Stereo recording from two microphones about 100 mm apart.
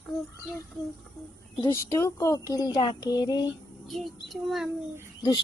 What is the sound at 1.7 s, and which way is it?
Speech, 30° left (ahead or behind).